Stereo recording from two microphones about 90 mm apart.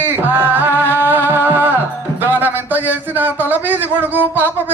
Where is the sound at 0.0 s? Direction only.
25° right (ahead or behind).